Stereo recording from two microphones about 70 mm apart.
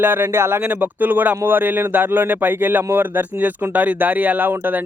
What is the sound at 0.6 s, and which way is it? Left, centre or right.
Speech, right.